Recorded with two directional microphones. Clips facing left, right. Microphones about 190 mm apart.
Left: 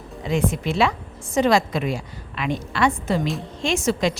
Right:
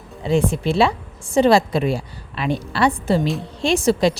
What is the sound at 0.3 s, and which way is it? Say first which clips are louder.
A woman's voice: right 4 dB; 30° right (ahead or behind).